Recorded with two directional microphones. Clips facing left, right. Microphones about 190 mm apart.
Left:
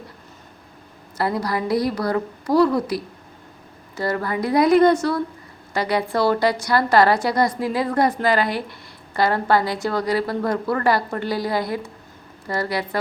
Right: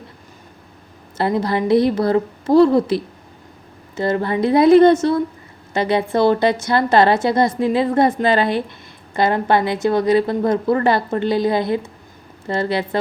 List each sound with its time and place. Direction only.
1.2 s a woman's voice: 25° right (ahead or behind)